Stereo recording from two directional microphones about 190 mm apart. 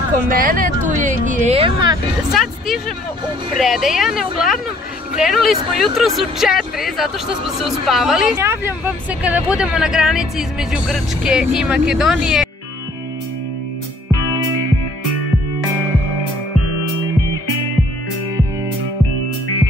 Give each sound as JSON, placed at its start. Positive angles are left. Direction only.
{"t": 0.3, "sound": "speech", "side_deg": -50}
{"t": 2.3, "sound": "speech", "side_deg": 0}
{"t": 8.4, "sound": "speech", "side_deg": -15}